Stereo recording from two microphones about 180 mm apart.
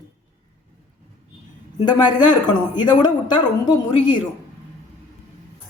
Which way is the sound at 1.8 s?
25° left (ahead or behind).